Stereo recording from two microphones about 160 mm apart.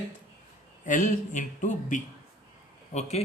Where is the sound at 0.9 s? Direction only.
50° left (ahead or behind).